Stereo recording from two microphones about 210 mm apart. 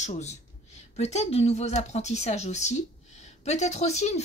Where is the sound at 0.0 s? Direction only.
30° left (ahead or behind).